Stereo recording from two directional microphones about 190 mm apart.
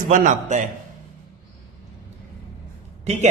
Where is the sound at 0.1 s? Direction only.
40° right (ahead or behind).